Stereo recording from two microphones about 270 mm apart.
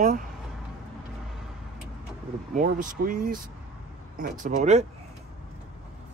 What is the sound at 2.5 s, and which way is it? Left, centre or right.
Speech, right.